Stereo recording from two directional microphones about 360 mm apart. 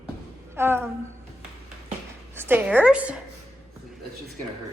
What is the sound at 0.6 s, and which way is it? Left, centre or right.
Speech, centre.